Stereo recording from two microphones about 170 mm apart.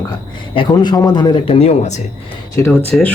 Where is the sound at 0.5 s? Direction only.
25° left (ahead or behind).